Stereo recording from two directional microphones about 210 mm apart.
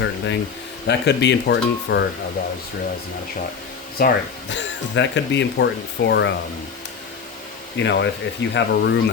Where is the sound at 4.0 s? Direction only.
50° left (ahead or behind).